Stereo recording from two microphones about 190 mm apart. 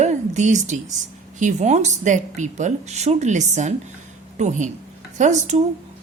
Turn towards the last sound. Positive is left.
turn(degrees=-40)  # may be behind; listen again after turning